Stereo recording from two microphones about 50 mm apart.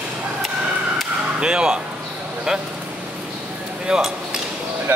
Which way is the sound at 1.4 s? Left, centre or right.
Centre.